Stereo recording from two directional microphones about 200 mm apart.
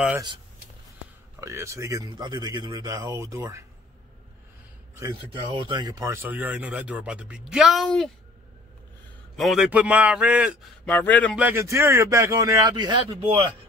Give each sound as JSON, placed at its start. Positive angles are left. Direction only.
{"t": 1.4, "sound": "speech", "side_deg": -15}
{"t": 4.9, "sound": "speech", "side_deg": -20}
{"t": 9.4, "sound": "a man's voice", "side_deg": 0}
{"t": 10.9, "sound": "a man's voice", "side_deg": 10}
{"t": 11.3, "sound": "speech", "side_deg": -10}